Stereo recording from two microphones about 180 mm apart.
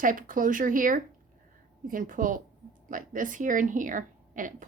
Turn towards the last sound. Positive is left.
turn(degrees=-45)  # may be behind; listen again after turning